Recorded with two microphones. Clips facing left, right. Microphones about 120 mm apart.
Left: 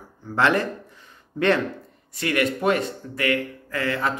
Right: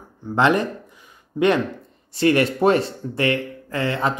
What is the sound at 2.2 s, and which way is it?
Speech, 30° right (ahead or behind).